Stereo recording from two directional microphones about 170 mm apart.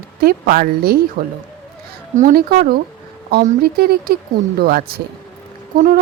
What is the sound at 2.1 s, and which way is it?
Speech, 60° right (ahead or behind).